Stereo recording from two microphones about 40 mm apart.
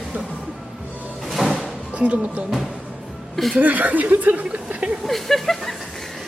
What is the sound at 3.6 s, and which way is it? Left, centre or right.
Speech, right.